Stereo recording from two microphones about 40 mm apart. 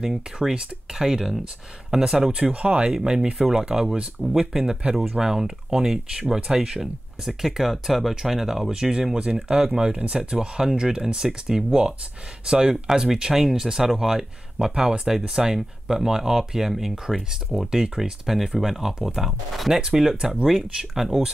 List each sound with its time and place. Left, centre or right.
0.4 s speech: centre
2.3 s speech: right
17.1 s speech: centre
17.6 s speech: centre
18.2 s speech: centre
19.7 s speech: centre